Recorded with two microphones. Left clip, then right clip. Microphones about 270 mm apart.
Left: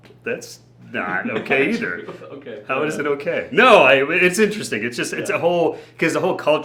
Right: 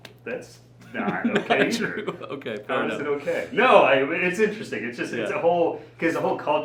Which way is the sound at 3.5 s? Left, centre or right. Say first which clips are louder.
Left 5 dB; left.